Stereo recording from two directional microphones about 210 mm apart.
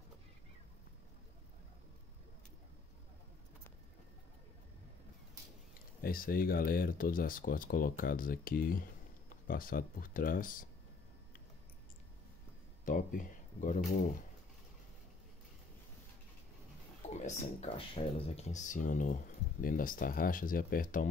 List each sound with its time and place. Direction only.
5.9 s speech: 45° left (ahead or behind)
12.8 s speech: 40° left (ahead or behind)
17.1 s speech: 35° left (ahead or behind)